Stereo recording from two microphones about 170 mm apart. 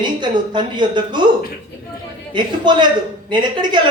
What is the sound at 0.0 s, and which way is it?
A woman's voice, 25° right (ahead or behind).